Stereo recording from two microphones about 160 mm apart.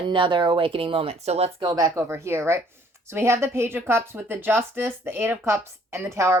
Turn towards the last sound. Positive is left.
turn(degrees=-15)  # may be behind; listen again after turning